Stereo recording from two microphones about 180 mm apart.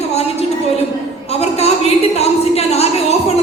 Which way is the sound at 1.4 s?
35° left (ahead or behind).